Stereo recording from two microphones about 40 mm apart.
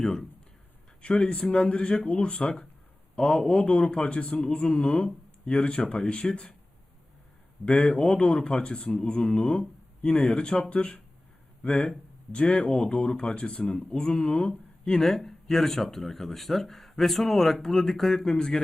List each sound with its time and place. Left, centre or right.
0.0 s speech: centre
7.6 s speech: left
15.0 s speech: centre